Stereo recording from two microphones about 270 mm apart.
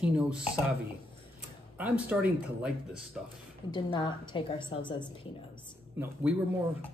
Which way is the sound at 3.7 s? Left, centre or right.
Centre.